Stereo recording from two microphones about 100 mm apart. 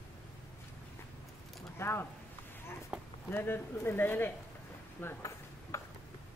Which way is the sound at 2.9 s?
10° right (ahead or behind).